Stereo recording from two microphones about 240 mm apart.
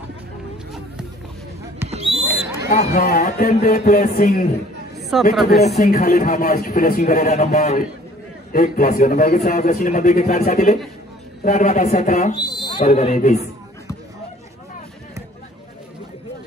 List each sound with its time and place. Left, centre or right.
1.9 s basketball bounce: right
2.4 s buzzer: centre
2.7 s a man's voice: left
5.1 s speech: centre
5.8 s a man's voice: left
12.4 s speech: centre